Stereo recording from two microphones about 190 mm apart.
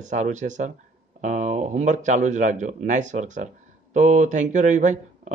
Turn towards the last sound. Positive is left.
turn(degrees=-40)  # may be behind; listen again after turning